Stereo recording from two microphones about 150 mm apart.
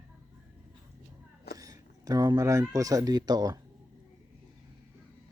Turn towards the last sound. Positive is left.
turn(degrees=-25)  # may be behind; listen again after turning